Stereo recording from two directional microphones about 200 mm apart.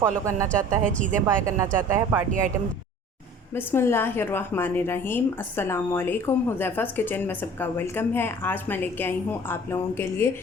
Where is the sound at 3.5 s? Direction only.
10° left (ahead or behind).